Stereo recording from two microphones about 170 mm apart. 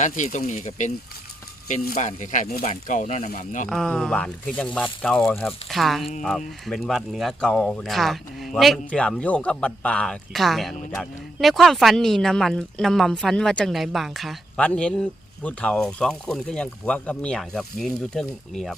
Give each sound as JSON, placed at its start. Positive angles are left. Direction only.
{"t": 0.0, "sound": "speech", "side_deg": 45}
{"t": 2.0, "sound": "speech", "side_deg": 45}
{"t": 3.7, "sound": "speech", "side_deg": 5}